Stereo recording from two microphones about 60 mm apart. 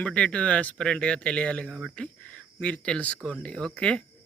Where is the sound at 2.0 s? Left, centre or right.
Centre.